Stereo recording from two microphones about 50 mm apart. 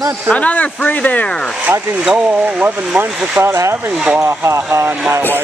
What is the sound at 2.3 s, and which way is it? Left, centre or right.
Speech, right.